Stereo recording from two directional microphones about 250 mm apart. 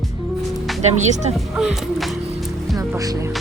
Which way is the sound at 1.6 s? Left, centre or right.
Centre.